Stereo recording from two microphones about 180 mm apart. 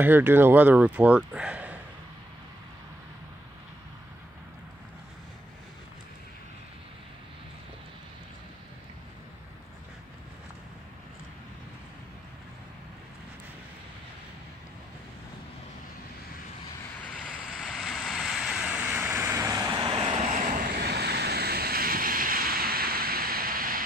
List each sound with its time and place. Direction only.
0.0 s speech: 10° right (ahead or behind)
17.0 s vehicle: 5° left (ahead or behind); by 20.1 s 25° right (ahead or behind)
20.1 s vehicle: 45° right (ahead or behind)
20.8 s vehicle: 65° right (ahead or behind)